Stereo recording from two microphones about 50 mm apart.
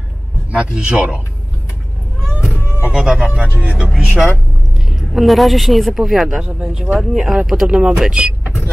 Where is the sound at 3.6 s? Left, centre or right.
Right.